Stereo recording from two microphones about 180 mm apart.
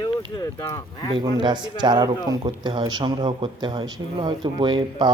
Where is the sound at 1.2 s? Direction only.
25° right (ahead or behind).